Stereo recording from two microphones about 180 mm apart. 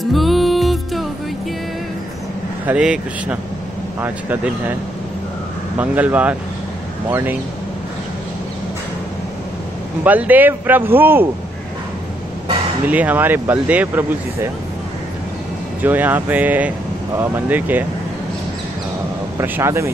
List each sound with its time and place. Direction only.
0.0 s music: centre (ahead or behind)
2.6 s speech: 5° right (ahead or behind)
5.8 s speech: 10° right (ahead or behind)
10.0 s speech: 10° right (ahead or behind)
12.8 s speech: 10° right (ahead or behind)
15.8 s speech: 10° right (ahead or behind)
19.3 s speech: 10° right (ahead or behind)